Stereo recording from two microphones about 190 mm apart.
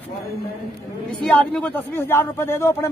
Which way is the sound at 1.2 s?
5° left (ahead or behind).